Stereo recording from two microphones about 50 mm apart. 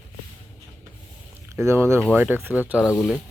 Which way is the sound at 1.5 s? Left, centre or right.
Right.